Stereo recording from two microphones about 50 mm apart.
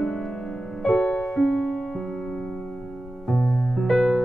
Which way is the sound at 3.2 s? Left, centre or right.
Centre.